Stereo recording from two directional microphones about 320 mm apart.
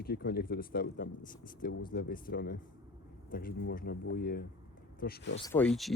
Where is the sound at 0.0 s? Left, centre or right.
Left.